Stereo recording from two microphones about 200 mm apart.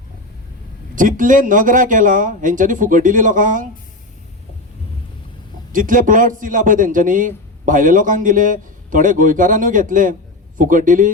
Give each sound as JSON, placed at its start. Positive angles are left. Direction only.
{"t": 0.9, "sound": "a man's voice", "side_deg": -40}
{"t": 5.7, "sound": "a man's voice", "side_deg": -40}